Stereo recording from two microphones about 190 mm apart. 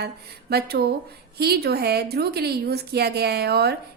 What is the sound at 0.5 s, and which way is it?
A woman's voice, 55° right (ahead or behind).